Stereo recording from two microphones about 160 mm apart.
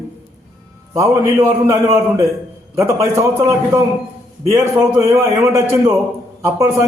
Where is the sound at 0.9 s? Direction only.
20° right (ahead or behind).